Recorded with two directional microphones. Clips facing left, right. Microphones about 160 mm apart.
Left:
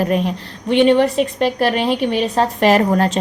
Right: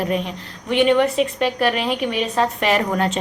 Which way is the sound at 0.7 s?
30° left (ahead or behind).